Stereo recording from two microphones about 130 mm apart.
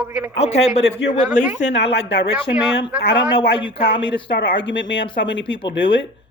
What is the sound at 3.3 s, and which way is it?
Speech, 45° left (ahead or behind).